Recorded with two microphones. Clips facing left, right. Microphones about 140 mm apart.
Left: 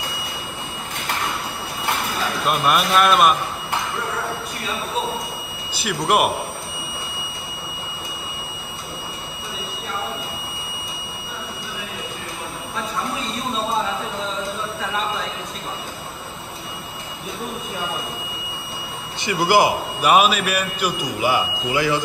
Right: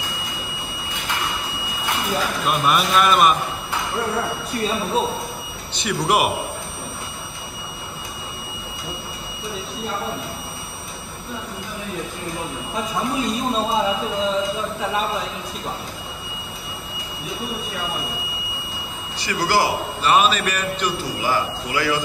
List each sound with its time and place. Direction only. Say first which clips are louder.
2.4 s a man's voice: left 2 dB; centre (ahead or behind)
5.8 s a man's voice: left 1 dB; centre (ahead or behind)
19.2 s a man's voice: left 3 dB; 20° left (ahead or behind)